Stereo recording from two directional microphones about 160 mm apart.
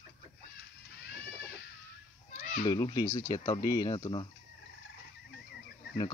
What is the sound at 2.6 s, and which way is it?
Speech, 25° left (ahead or behind).